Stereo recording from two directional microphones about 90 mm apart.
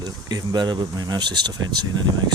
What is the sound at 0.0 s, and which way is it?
Speech, 50° right (ahead or behind).